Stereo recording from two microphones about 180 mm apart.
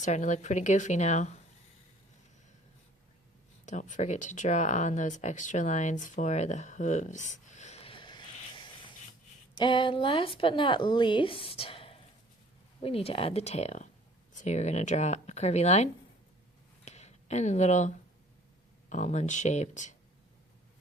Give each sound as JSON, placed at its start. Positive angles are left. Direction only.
{"t": 0.0, "sound": "speech", "side_deg": 40}
{"t": 3.7, "sound": "speech", "side_deg": 45}
{"t": 9.6, "sound": "speech", "side_deg": 25}
{"t": 16.8, "sound": "a sound", "side_deg": 40}
{"t": 18.9, "sound": "speech", "side_deg": 40}